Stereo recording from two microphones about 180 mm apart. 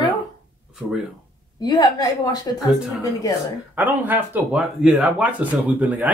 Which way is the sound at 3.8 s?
10° right (ahead or behind).